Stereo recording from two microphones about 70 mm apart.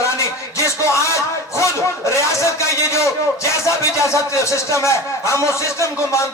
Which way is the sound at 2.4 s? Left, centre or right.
Left.